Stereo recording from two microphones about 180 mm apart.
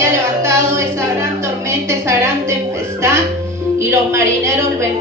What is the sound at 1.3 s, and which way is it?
A woman's voice, 15° right (ahead or behind).